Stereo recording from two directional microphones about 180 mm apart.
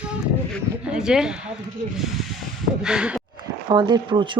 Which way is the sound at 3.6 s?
25° right (ahead or behind).